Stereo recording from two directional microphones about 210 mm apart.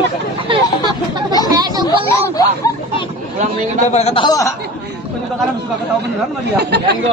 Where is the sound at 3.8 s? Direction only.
30° left (ahead or behind).